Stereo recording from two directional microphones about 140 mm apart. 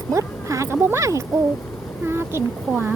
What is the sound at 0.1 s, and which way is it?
Speech, 20° right (ahead or behind).